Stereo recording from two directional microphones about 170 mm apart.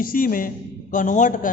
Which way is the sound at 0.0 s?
55° left (ahead or behind).